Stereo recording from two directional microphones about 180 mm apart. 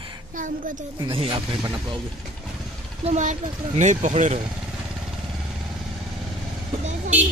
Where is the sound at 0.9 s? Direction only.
30° right (ahead or behind).